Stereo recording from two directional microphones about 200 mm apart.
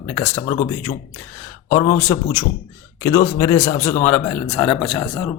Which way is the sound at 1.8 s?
15° left (ahead or behind).